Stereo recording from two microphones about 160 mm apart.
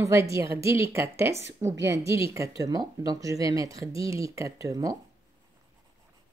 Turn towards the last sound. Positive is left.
turn(degrees=-20)  # may be behind; listen again after turning